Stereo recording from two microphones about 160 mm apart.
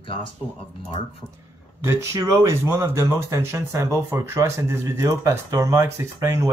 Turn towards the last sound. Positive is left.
turn(degrees=-20)  # may be behind; listen again after turning